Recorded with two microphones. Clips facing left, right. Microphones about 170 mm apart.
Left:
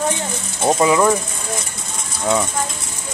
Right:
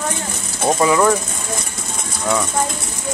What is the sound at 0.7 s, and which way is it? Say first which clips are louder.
Mechanisms: even; 15° left (ahead or behind).